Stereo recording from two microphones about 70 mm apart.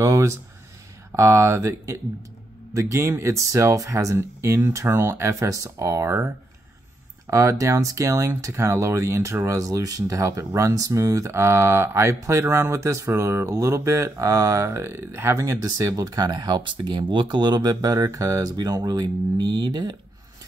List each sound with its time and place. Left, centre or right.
0.0 s speech: right
7.2 s speech: right
13.5 s speech: right
18.9 s speech: right